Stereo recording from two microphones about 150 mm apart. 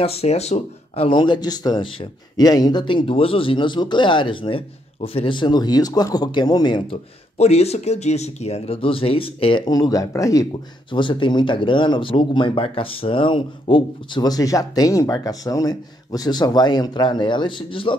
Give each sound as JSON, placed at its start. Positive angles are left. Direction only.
{"t": 0.0, "sound": "speech", "side_deg": 40}
{"t": 7.3, "sound": "speech", "side_deg": 45}
{"t": 10.9, "sound": "speech", "side_deg": 35}